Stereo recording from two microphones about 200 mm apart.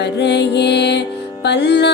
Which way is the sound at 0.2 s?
60° left (ahead or behind).